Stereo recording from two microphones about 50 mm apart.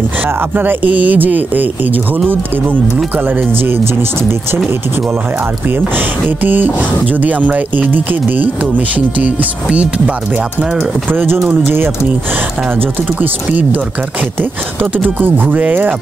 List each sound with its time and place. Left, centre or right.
0.6 s speech: right
3.3 s speech: right
5.9 s speech: right
11.1 s speech: right
13.2 s speech: right
15.1 s speech: right